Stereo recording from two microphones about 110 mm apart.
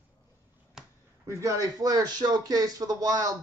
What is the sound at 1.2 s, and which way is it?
Speech, 30° right (ahead or behind).